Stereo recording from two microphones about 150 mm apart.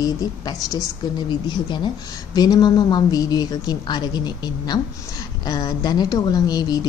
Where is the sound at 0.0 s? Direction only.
25° left (ahead or behind).